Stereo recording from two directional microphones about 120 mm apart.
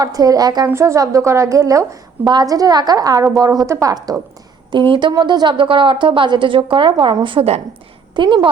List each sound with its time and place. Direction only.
0.0 s a woman's voice: 30° right (ahead or behind)
4.7 s a woman's voice: 40° right (ahead or behind)
8.1 s a woman's voice: 40° right (ahead or behind)